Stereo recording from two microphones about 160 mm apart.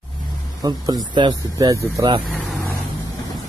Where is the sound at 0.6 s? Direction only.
25° right (ahead or behind).